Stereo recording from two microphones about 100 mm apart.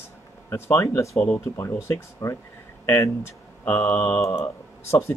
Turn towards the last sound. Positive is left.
turn(degrees=25)  # may be behind; listen again after turning